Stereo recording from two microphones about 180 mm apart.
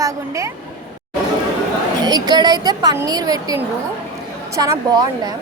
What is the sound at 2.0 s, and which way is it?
A woman's voice, 20° right (ahead or behind).